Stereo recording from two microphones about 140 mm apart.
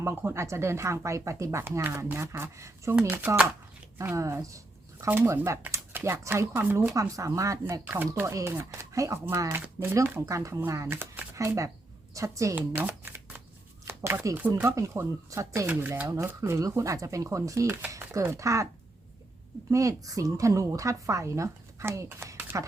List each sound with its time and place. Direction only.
0.0 s speech: 15° right (ahead or behind)
12.5 s speech: 10° right (ahead or behind)
19.7 s speech: 25° right (ahead or behind)